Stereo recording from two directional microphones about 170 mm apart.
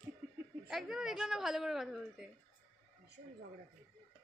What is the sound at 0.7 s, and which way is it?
A woman's voice, centre (ahead or behind).